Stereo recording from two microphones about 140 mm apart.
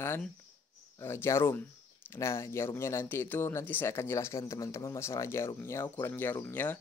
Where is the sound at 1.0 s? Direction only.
20° left (ahead or behind).